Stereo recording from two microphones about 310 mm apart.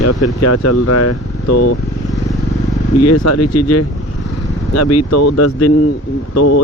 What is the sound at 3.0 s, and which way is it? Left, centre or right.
Speech, left.